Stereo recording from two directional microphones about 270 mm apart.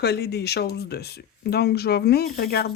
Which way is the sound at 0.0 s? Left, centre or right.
Left.